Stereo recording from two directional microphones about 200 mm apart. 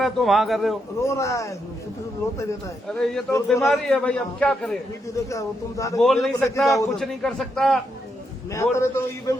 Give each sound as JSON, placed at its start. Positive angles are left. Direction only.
{"t": 0.0, "sound": "a man's voice", "side_deg": 0}
{"t": 1.0, "sound": "a man's voice", "side_deg": 15}
{"t": 2.9, "sound": "a man's voice", "side_deg": 0}
{"t": 3.3, "sound": "a man's voice", "side_deg": 15}
{"t": 3.7, "sound": "a man's voice", "side_deg": 5}
{"t": 5.1, "sound": "a man's voice", "side_deg": 15}
{"t": 6.0, "sound": "a man's voice", "side_deg": 0}
{"t": 8.5, "sound": "a man's voice", "side_deg": 15}